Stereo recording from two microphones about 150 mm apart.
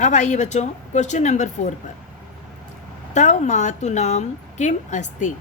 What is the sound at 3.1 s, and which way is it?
A woman's voice, 50° left (ahead or behind).